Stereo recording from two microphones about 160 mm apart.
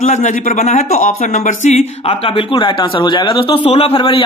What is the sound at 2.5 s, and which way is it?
Speech, 30° left (ahead or behind).